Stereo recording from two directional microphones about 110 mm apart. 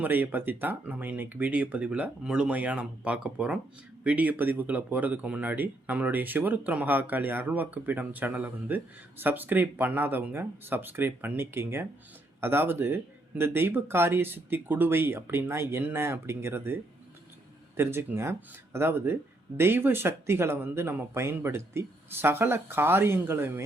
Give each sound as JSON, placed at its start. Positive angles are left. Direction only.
{"t": 0.0, "sound": "speech", "side_deg": -15}